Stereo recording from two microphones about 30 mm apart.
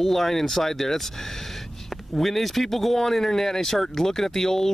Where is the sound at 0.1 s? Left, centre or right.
Centre.